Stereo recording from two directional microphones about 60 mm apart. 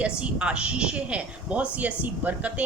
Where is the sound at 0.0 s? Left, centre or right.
Centre.